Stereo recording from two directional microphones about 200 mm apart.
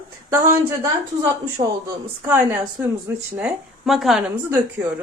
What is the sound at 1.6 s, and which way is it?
Speech, 25° right (ahead or behind).